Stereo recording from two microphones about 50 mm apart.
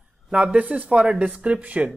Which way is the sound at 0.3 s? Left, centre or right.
Right.